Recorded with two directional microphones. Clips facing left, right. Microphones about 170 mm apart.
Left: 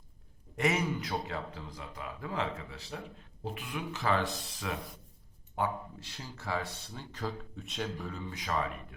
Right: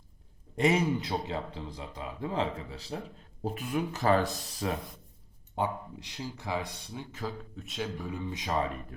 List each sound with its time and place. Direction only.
0.5 s speech: 30° right (ahead or behind)
5.5 s speech: 20° right (ahead or behind); by 8.1 s centre (ahead or behind)
8.1 s speech: 20° right (ahead or behind)